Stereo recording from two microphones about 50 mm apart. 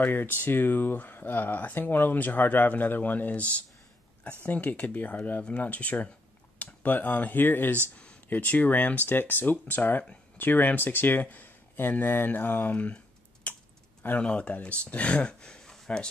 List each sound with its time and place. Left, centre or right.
0.0 s speech: left
12.7 s typing: left
14.2 s speech: left